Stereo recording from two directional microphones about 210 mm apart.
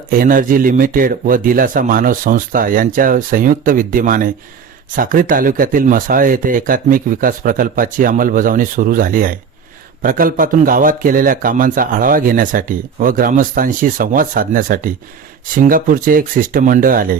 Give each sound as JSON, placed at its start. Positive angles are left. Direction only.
{"t": 0.1, "sound": "a man's voice", "side_deg": -40}